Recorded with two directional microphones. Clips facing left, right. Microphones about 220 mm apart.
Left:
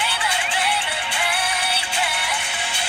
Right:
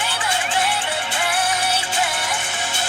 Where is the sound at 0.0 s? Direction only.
45° right (ahead or behind).